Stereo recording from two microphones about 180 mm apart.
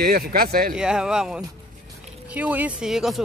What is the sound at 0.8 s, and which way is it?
Speech, 5° right (ahead or behind).